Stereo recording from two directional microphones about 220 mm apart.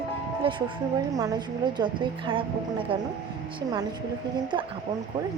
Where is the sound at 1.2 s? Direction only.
15° right (ahead or behind).